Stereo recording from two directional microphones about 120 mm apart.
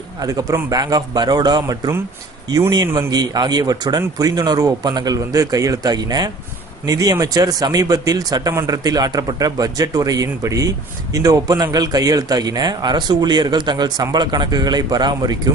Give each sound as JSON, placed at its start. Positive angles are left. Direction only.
{"t": 0.2, "sound": "speech", "side_deg": -30}
{"t": 3.1, "sound": "speech", "side_deg": -35}